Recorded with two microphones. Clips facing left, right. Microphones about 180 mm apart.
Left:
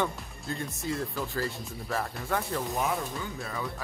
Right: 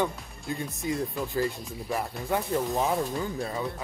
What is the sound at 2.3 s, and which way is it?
Speech, 20° right (ahead or behind).